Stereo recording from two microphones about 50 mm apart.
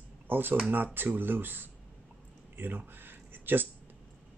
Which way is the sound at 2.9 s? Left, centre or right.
Right.